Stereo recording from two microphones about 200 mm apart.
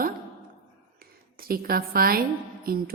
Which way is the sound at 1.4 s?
50° right (ahead or behind).